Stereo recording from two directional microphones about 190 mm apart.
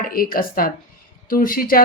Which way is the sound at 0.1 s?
50° left (ahead or behind).